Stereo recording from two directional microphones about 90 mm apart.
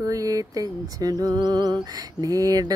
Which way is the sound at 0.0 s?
40° right (ahead or behind).